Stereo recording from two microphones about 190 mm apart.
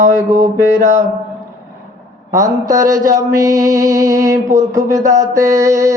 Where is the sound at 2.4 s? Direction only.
40° right (ahead or behind).